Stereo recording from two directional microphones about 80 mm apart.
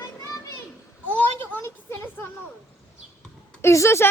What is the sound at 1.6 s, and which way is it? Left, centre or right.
Speech, left.